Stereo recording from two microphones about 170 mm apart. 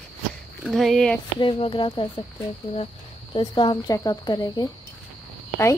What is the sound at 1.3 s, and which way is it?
Speech, 30° left (ahead or behind).